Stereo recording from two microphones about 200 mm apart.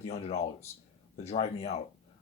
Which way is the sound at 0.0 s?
30° left (ahead or behind).